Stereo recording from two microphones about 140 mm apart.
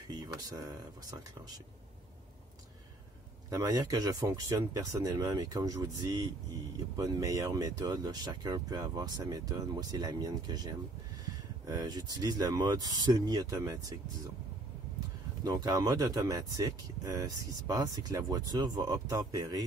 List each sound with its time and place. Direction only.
0.1 s speech: 30° right (ahead or behind)
3.4 s speech: 25° right (ahead or behind)
15.4 s speech: 25° right (ahead or behind)